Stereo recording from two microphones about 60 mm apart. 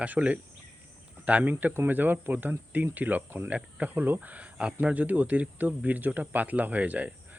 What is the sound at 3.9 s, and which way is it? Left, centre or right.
Speech, right.